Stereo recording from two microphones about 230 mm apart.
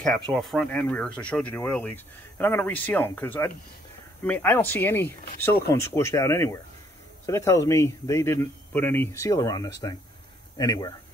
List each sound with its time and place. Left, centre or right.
0.3 s speech: centre